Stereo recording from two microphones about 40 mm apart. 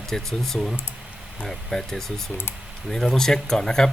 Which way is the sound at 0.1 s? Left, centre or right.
Centre.